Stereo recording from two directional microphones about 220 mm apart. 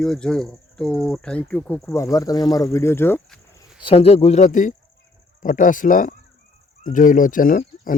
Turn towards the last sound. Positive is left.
turn(degrees=40)  # may be behind; listen again after turning